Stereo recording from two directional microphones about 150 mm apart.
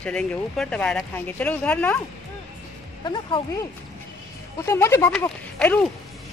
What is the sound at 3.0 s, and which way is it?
Speech, 30° left (ahead or behind).